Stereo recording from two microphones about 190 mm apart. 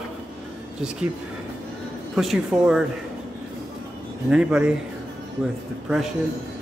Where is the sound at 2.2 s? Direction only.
Centre (ahead or behind).